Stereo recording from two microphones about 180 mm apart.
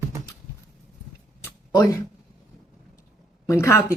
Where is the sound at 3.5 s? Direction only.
15° left (ahead or behind).